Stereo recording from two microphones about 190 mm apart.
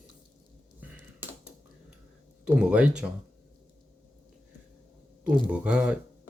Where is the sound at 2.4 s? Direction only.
5° right (ahead or behind).